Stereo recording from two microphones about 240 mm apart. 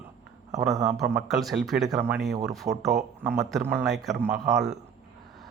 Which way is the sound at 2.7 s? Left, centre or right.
Right.